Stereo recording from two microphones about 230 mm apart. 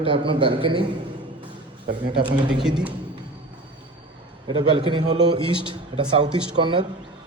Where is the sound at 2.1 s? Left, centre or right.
Right.